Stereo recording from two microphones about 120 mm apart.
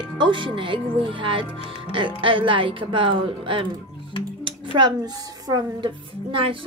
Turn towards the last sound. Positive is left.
turn(degrees=-45)  # may be behind; listen again after turning